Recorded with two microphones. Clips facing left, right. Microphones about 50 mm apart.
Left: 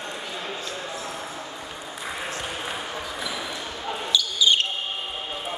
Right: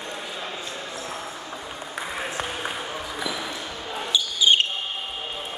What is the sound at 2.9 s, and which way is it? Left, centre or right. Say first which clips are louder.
Basketball bounce: right 1 dB; centre.